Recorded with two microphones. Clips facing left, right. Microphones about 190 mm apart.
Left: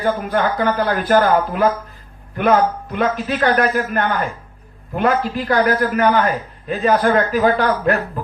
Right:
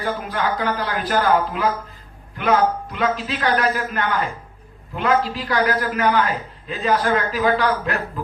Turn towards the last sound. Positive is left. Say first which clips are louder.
# left 4 dB
turn(degrees=45)  # may be behind; listen again after turning